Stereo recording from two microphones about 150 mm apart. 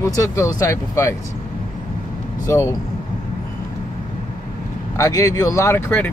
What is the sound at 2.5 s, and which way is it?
Speech, 20° left (ahead or behind).